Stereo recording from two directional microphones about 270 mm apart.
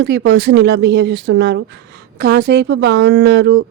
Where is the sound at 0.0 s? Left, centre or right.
Right.